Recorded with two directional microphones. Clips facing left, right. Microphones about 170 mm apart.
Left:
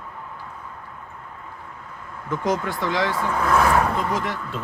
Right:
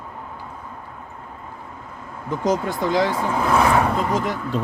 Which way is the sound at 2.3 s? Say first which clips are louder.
Right 2 dB; 35° right (ahead or behind).